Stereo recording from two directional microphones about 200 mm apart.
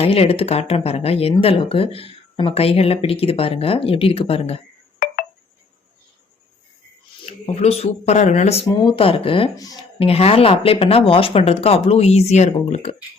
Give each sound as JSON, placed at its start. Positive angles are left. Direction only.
{"t": 0.0, "sound": "speech", "side_deg": 30}
{"t": 7.3, "sound": "speech", "side_deg": 30}